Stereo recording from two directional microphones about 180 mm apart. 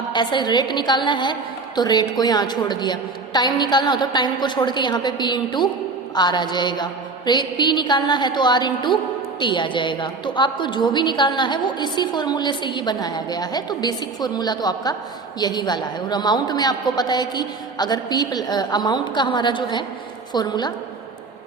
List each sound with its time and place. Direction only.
0.1 s a woman's voice: 25° left (ahead or behind)